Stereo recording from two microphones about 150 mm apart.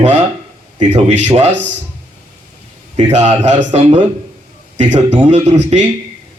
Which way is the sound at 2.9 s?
45° right (ahead or behind).